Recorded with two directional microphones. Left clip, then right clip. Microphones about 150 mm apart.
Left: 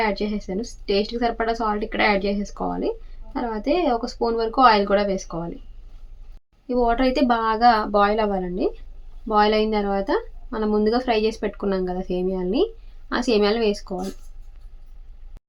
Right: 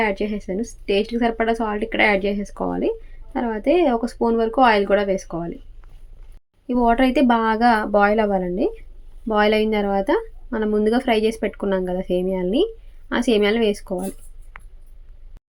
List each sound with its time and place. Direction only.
0.0 s speech: 20° right (ahead or behind)
6.7 s speech: 25° right (ahead or behind)